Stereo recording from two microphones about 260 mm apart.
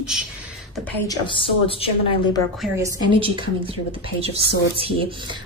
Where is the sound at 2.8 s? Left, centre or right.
Centre.